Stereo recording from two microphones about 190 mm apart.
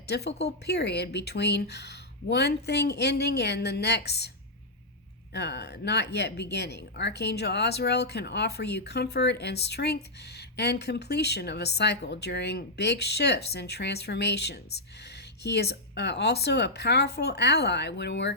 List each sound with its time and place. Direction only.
0.1 s a woman's voice: 60° left (ahead or behind)
5.3 s a woman's voice: 60° left (ahead or behind)